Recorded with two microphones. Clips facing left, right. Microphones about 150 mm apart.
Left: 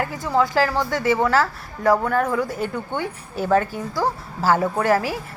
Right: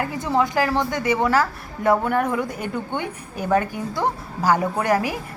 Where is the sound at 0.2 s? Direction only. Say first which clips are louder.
Left 1 dB; 20° right (ahead or behind).